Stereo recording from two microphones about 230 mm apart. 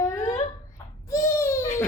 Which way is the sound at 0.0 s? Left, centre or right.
Centre.